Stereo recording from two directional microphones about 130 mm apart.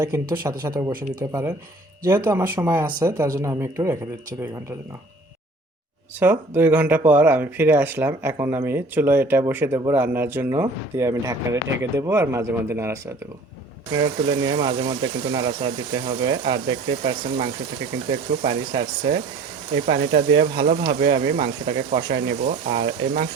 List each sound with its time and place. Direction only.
0.0 s speech: 20° right (ahead or behind)
2.7 s speech: 30° right (ahead or behind)
6.1 s speech: 15° right (ahead or behind)
13.9 s speech: 35° right (ahead or behind)
18.4 s speech: 35° right (ahead or behind)
21.8 s speech: 55° right (ahead or behind); by 22.8 s 80° right